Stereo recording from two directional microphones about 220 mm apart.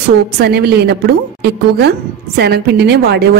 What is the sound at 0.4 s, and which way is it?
A woman's voice, 45° right (ahead or behind).